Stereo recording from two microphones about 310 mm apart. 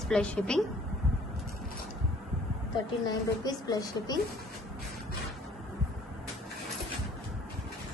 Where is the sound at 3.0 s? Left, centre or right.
Centre.